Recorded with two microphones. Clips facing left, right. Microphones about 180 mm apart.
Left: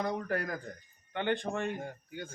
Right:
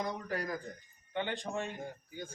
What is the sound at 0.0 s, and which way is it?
A man's voice, 55° left (ahead or behind).